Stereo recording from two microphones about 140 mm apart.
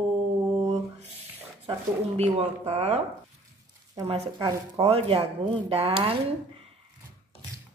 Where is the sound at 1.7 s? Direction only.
50° right (ahead or behind).